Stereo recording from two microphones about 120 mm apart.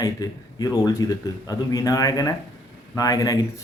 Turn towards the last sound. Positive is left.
turn(degrees=30)  # may be behind; listen again after turning